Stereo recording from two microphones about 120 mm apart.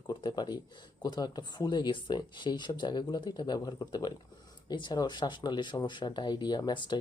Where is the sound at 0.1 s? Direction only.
35° left (ahead or behind).